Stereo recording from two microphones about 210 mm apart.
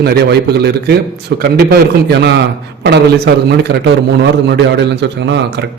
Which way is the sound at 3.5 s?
55° right (ahead or behind).